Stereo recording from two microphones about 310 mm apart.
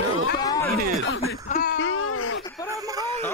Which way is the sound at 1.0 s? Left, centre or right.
Left.